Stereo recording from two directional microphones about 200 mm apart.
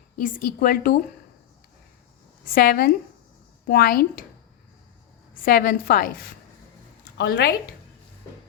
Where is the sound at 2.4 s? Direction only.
45° left (ahead or behind).